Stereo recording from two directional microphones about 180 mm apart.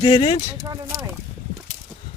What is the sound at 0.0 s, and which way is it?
Speech, 30° left (ahead or behind).